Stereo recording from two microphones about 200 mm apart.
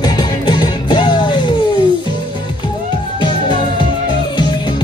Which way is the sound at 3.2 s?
25° left (ahead or behind).